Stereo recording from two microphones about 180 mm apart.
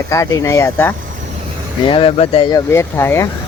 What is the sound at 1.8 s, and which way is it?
Speech, 30° left (ahead or behind).